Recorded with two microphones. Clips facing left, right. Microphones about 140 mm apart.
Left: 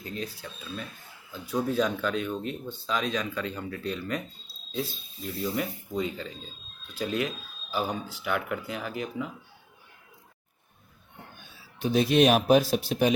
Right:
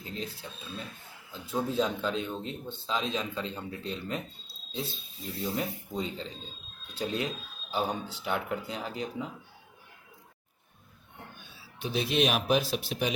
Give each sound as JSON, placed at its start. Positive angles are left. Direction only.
{"t": 0.0, "sound": "speech", "side_deg": -25}
{"t": 5.5, "sound": "speech", "side_deg": -30}
{"t": 11.8, "sound": "speech", "side_deg": 45}